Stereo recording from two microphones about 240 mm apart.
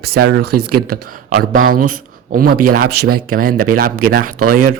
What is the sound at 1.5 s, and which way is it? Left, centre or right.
Speech, right.